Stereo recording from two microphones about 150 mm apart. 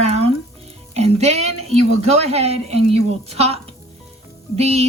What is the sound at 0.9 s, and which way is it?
Speech, 45° right (ahead or behind).